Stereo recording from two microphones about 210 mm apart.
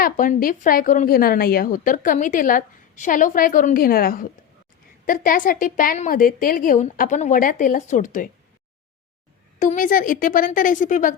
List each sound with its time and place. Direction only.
0.0 s a woman's voice: 40° left (ahead or behind)
9.6 s a woman's voice: 40° left (ahead or behind)